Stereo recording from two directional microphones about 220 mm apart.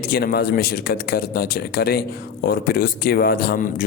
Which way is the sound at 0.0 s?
45° left (ahead or behind).